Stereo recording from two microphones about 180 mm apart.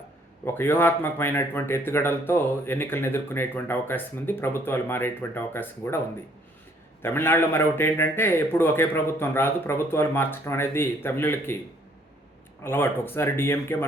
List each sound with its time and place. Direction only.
0.4 s speech: 10° left (ahead or behind)
7.0 s speech: 10° left (ahead or behind)
12.6 s speech: 10° left (ahead or behind)